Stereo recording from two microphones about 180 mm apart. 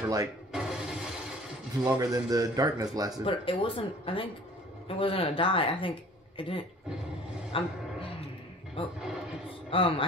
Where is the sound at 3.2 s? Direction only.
30° left (ahead or behind).